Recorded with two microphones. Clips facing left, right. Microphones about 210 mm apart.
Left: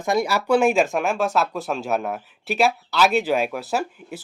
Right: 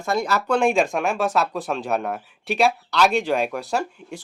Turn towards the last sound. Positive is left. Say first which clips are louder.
# even
turn(degrees=5)  # may be behind; listen again after turning